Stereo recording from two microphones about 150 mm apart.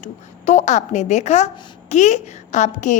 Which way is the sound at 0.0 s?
50° left (ahead or behind).